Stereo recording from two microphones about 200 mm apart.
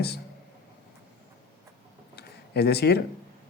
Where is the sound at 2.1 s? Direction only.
55° left (ahead or behind).